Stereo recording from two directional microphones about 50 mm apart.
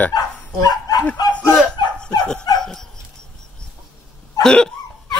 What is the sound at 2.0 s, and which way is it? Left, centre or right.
Dog, centre.